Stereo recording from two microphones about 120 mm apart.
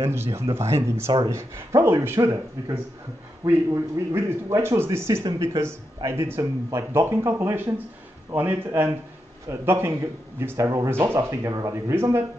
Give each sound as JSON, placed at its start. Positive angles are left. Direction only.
{"t": 0.0, "sound": "a man's voice", "side_deg": -20}